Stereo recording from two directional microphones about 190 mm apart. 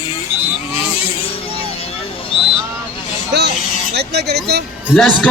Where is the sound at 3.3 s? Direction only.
60° right (ahead or behind).